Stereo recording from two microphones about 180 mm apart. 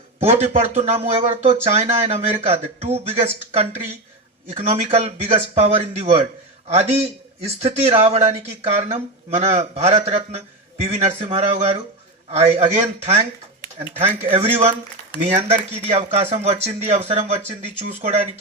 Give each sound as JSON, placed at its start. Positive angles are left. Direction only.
{"t": 0.2, "sound": "speech", "side_deg": -35}